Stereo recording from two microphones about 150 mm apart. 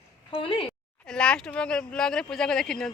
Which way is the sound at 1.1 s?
5° left (ahead or behind).